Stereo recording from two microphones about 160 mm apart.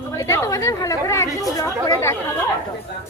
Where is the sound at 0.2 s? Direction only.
20° left (ahead or behind).